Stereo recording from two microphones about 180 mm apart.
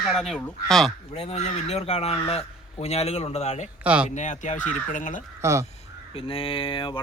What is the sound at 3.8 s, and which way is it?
Speech, 10° right (ahead or behind).